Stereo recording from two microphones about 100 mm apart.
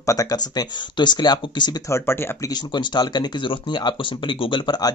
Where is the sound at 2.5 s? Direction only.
50° left (ahead or behind).